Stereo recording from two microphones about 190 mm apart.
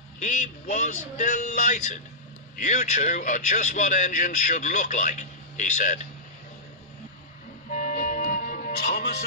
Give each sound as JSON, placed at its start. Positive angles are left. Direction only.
{"t": 0.2, "sound": "speech", "side_deg": 40}
{"t": 7.7, "sound": "music", "side_deg": 45}